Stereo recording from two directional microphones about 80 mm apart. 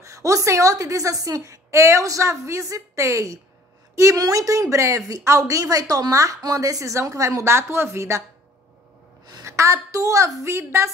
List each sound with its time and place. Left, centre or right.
0.0 s a woman's voice: right
9.4 s a woman's voice: right